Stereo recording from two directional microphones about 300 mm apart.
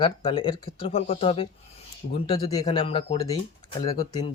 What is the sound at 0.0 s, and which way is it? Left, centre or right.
Speech, centre.